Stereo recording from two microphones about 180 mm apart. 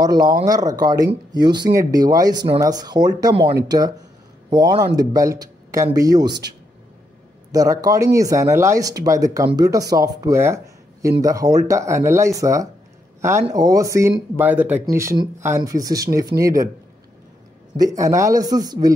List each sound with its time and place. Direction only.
0.0 s speech: 20° right (ahead or behind)
7.5 s speech: 20° right (ahead or behind)
17.7 s speech: 20° right (ahead or behind)